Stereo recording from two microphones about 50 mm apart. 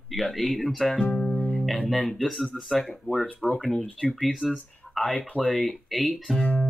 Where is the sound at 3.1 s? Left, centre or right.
Left.